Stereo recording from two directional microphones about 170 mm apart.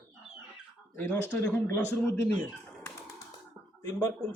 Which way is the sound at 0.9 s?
15° left (ahead or behind).